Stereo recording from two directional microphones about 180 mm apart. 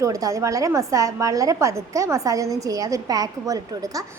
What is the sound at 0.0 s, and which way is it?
A woman's voice, 20° right (ahead or behind).